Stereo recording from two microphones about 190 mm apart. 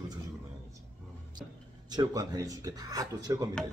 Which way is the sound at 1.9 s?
20° right (ahead or behind).